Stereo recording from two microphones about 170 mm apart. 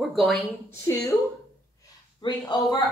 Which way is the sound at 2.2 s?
25° left (ahead or behind).